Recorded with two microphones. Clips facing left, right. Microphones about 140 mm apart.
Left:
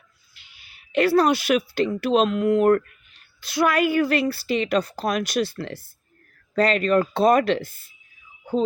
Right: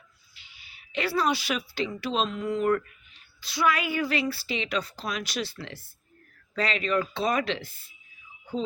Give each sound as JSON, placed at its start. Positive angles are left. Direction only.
{"t": 0.3, "sound": "a woman's voice", "side_deg": 55}